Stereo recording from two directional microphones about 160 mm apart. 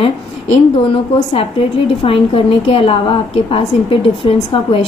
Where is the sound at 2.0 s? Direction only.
35° left (ahead or behind).